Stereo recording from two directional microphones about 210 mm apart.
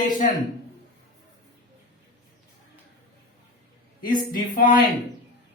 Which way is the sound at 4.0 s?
40° left (ahead or behind).